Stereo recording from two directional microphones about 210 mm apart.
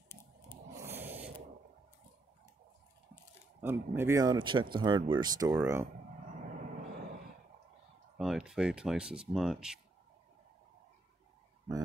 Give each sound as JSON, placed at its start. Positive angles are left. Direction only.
{"t": 0.8, "sound": "a sound", "side_deg": -10}
{"t": 3.6, "sound": "speech", "side_deg": -10}
{"t": 8.2, "sound": "speech", "side_deg": 0}